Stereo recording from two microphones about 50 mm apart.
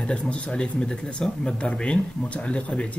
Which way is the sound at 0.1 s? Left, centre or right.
Centre.